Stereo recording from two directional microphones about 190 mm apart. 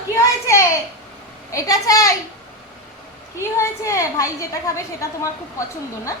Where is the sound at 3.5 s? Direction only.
15° left (ahead or behind).